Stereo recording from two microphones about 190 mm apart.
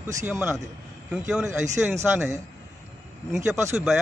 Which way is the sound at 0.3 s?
10° right (ahead or behind).